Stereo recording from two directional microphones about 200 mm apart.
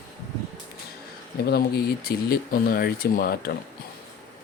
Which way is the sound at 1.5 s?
50° left (ahead or behind).